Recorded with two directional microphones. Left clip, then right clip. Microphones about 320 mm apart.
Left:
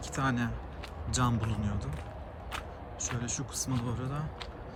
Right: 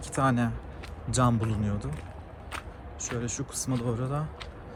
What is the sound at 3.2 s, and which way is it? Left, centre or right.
Speech, centre.